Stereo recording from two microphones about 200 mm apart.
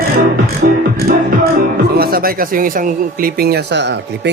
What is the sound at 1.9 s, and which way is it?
Speech, 50° right (ahead or behind).